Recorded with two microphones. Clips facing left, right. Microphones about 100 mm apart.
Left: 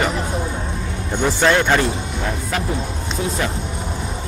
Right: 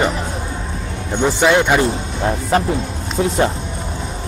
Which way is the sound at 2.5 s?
35° right (ahead or behind).